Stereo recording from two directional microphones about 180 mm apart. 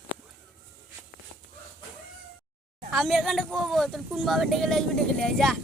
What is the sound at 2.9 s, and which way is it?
Speech, centre (ahead or behind).